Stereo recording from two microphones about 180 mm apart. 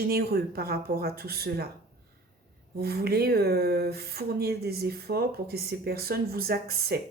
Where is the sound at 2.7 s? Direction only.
60° right (ahead or behind).